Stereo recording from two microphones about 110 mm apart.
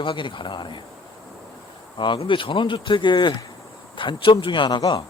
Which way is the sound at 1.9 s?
45° left (ahead or behind).